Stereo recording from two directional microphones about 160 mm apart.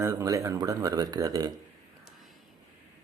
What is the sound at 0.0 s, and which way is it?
Speech, 20° right (ahead or behind).